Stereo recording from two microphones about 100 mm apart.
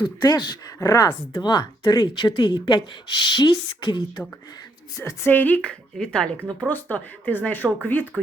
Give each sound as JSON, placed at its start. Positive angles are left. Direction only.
{"t": 0.0, "sound": "speech", "side_deg": 40}
{"t": 4.9, "sound": "a woman's voice", "side_deg": 30}
{"t": 5.3, "sound": "speech", "side_deg": 15}
{"t": 8.1, "sound": "speech", "side_deg": 0}